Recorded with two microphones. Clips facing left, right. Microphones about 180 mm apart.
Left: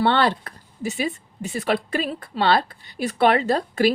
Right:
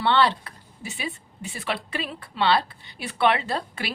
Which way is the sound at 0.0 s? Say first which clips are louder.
Left 2 dB; 45° left (ahead or behind).